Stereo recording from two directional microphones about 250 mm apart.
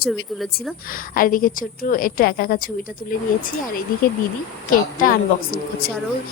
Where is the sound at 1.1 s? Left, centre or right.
Left.